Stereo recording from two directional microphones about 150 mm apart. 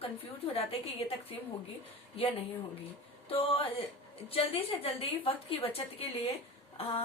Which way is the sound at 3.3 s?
40° left (ahead or behind).